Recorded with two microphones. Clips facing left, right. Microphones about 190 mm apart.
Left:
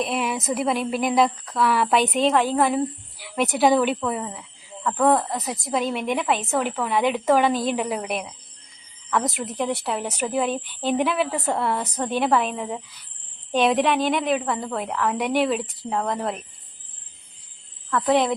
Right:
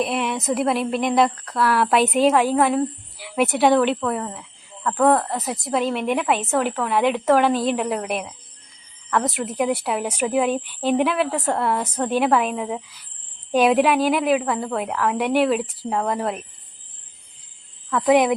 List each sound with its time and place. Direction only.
0.0 s a woman's voice: centre (ahead or behind)
18.1 s speech: 15° right (ahead or behind)